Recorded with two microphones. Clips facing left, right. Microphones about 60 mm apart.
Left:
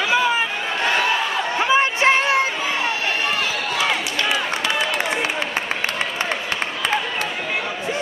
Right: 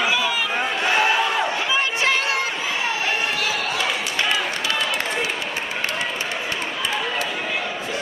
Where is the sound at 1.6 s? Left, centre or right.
Left.